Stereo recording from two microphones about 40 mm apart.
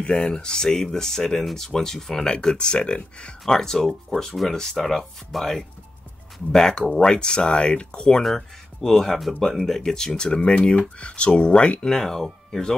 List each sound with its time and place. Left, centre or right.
0.0 s speech: left
2.3 s speech: left
3.4 s speech: centre
8.2 s speech: centre; by 11.8 s left
11.8 s speech: centre